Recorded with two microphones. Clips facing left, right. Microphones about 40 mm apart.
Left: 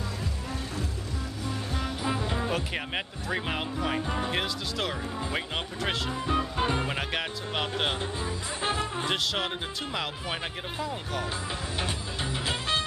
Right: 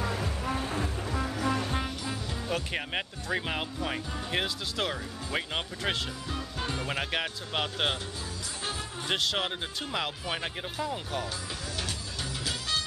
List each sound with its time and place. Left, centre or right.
0.0 s music: right
2.0 s music: left
2.5 s speech: centre
6.2 s music: left
6.9 s speech: centre
9.1 s speech: centre
12.4 s music: left